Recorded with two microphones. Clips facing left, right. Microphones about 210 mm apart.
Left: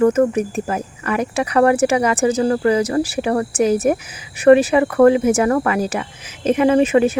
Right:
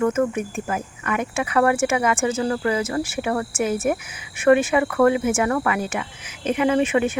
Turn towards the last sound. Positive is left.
turn(degrees=35)  # may be behind; listen again after turning